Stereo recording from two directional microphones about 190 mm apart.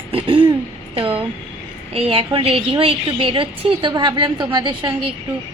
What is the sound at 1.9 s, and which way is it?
Speech, 30° right (ahead or behind).